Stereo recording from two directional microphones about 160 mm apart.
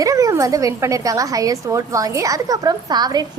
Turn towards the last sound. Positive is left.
turn(degrees=-25)  # may be behind; listen again after turning